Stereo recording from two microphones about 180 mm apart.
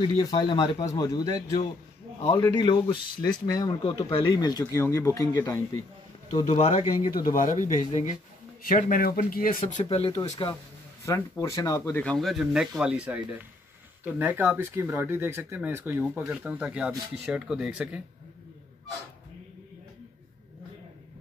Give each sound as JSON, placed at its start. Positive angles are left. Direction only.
{"t": 0.0, "sound": "speech", "side_deg": 20}
{"t": 6.3, "sound": "speech", "side_deg": 35}
{"t": 7.3, "sound": "speech", "side_deg": 45}
{"t": 9.8, "sound": "speech", "side_deg": 35}
{"t": 10.1, "sound": "speech", "side_deg": 20}